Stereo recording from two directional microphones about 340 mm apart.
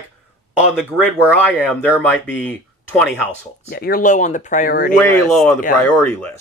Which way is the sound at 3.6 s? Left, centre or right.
Left.